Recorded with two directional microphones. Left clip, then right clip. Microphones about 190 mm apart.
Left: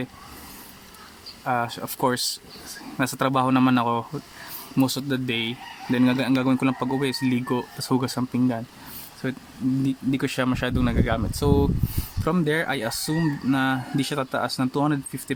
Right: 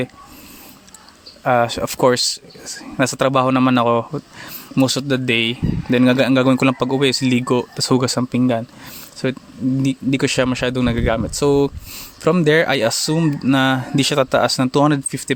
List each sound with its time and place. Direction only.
1.5 s speech: 35° right (ahead or behind)